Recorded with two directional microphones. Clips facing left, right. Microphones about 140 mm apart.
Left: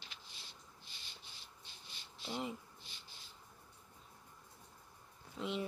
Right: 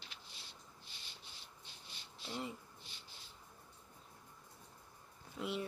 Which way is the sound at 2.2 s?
15° left (ahead or behind).